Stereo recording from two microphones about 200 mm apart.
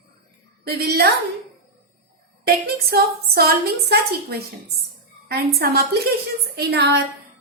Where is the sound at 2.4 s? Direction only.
50° right (ahead or behind).